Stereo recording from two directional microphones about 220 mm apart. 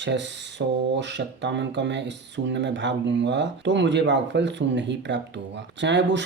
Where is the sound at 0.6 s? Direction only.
55° right (ahead or behind).